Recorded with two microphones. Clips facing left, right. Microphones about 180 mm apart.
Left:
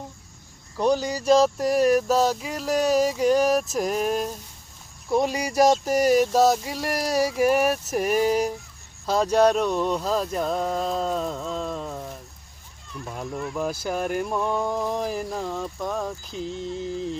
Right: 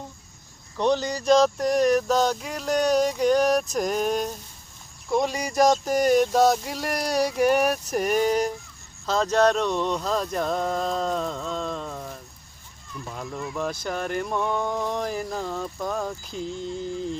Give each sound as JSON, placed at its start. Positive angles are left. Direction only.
{"t": 0.8, "sound": "speech", "side_deg": 10}
{"t": 9.0, "sound": "a sound", "side_deg": 10}
{"t": 13.1, "sound": "speech", "side_deg": 5}